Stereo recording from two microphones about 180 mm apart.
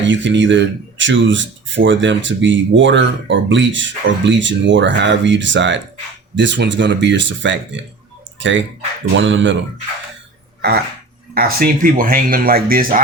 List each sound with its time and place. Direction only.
0.0 s speech: 90° right
11.3 s speech: 55° right (ahead or behind)